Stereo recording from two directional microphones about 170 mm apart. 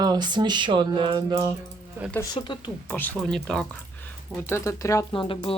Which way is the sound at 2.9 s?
10° left (ahead or behind).